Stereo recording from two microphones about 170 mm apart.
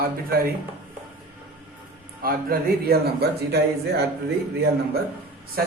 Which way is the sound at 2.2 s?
60° right (ahead or behind).